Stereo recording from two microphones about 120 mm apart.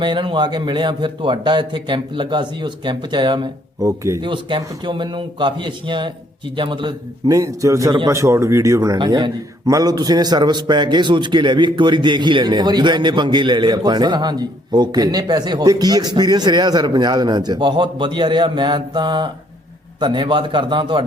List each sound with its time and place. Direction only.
0.0 s a man's voice: 40° right (ahead or behind)
4.2 s a man's voice: 40° right (ahead or behind)
7.3 s a man's voice: 30° right (ahead or behind)